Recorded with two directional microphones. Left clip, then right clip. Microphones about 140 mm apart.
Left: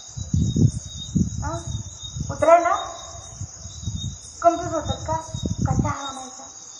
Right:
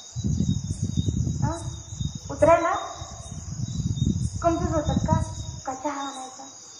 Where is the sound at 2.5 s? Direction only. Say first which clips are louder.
Left 6 dB; 30° right (ahead or behind).